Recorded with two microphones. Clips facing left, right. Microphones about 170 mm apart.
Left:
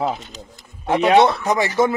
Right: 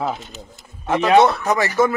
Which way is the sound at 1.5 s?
20° left (ahead or behind).